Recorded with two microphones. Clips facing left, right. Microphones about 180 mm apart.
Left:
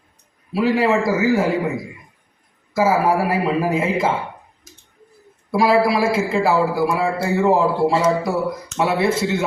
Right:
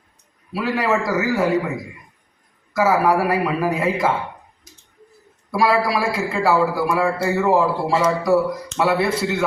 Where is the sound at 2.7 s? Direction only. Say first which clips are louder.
Even; 25° left (ahead or behind).